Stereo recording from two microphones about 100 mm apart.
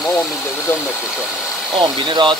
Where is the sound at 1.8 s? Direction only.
50° right (ahead or behind).